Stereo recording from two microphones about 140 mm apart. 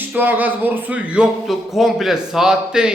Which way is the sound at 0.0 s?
15° right (ahead or behind).